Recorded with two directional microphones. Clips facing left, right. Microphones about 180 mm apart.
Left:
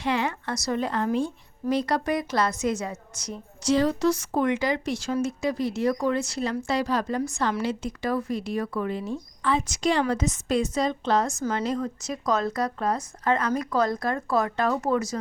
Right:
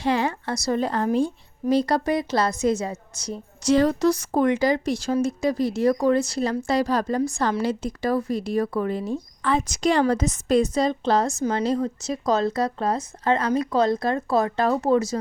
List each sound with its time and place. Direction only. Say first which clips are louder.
0.0 s speech: right 3 dB; 35° right (ahead or behind)
3.6 s a woman's voice: right 3 dB; 45° right (ahead or behind); by 15.2 s 25° right (ahead or behind)